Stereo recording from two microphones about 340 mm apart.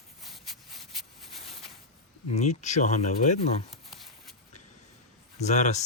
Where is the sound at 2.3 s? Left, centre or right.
Centre.